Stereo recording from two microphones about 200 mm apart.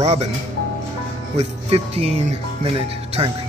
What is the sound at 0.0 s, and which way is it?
Speech, 35° right (ahead or behind).